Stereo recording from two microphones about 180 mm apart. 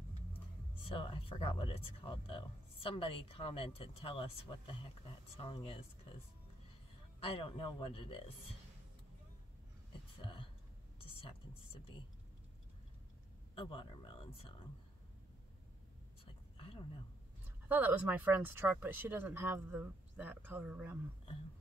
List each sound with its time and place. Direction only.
0.8 s speech: 30° left (ahead or behind)
7.2 s speech: 30° left (ahead or behind)
11.0 s a sound: 30° left (ahead or behind)
13.6 s speech: 30° left (ahead or behind)
16.5 s a sound: 30° left (ahead or behind)
17.6 s speech: 10° right (ahead or behind)